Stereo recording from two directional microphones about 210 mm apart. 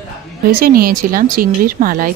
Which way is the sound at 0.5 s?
45° right (ahead or behind).